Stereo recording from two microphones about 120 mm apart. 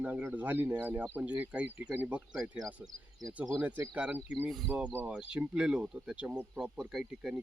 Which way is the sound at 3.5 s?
15° right (ahead or behind).